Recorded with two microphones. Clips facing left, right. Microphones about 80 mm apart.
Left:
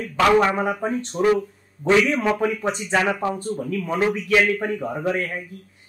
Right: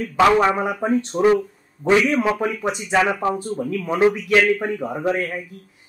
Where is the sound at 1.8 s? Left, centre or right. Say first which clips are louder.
Right 1 dB; centre.